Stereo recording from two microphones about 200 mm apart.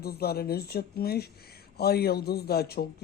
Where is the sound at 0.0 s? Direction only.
50° left (ahead or behind).